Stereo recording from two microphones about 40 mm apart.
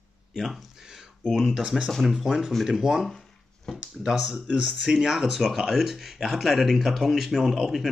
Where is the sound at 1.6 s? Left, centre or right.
Right.